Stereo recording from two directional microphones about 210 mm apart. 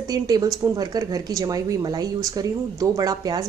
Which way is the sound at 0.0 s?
20° right (ahead or behind).